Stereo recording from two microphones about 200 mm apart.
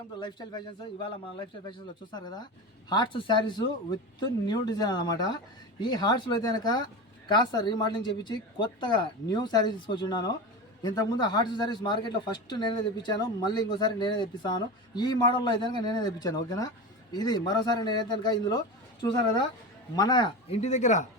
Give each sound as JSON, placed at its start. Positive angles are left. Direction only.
{"t": 0.2, "sound": "a man's voice", "side_deg": 20}